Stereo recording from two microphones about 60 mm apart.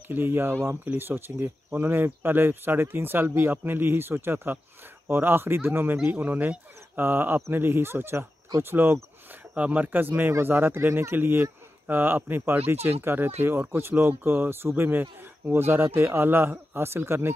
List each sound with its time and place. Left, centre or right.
0.1 s speech: right
6.2 s speech: right
9.6 s speech: right